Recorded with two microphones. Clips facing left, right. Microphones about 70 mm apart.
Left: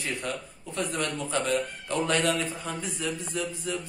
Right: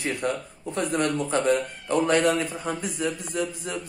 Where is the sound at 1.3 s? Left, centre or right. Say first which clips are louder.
Right 5 dB; right.